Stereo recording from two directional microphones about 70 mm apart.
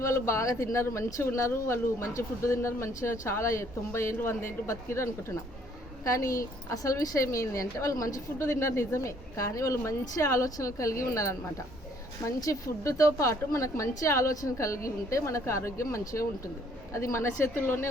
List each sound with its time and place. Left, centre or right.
0.0 s a woman's voice: left